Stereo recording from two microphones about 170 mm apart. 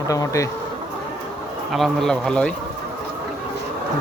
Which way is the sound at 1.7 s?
Centre (ahead or behind).